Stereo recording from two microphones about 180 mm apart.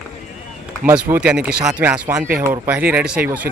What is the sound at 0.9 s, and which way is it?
Speech, 10° right (ahead or behind).